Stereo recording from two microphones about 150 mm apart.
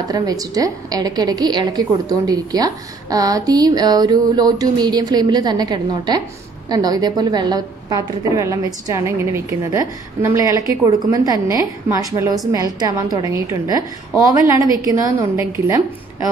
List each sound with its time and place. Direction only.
0.1 s a woman's voice: 25° right (ahead or behind)